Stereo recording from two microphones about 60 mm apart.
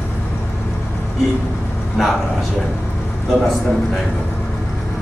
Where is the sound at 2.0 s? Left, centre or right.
Centre.